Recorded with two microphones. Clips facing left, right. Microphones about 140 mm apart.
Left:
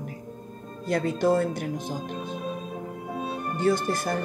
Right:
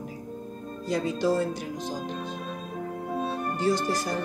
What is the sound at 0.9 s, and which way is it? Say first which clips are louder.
Speech: left 2 dB; 55° left (ahead or behind).